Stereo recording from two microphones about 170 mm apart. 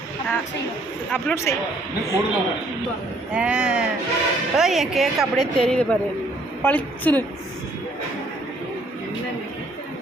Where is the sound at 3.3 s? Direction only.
5° right (ahead or behind).